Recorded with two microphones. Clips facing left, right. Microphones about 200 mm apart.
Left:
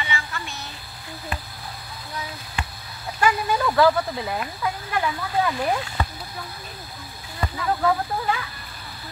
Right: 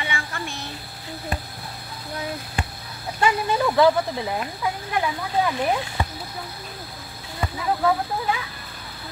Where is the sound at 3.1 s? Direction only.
20° right (ahead or behind).